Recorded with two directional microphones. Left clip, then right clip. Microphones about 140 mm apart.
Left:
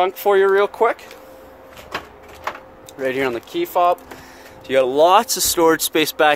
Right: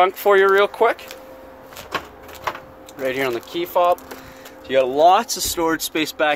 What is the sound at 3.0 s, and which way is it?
Speech, 65° left (ahead or behind).